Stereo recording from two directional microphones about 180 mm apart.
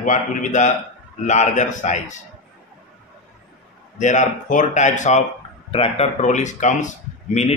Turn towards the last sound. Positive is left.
turn(degrees=40)  # may be behind; listen again after turning